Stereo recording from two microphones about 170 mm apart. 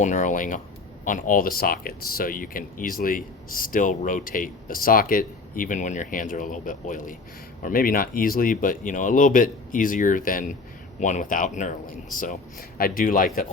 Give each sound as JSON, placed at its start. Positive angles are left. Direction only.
{"t": 0.0, "sound": "speech", "side_deg": 45}
{"t": 12.2, "sound": "speech", "side_deg": 55}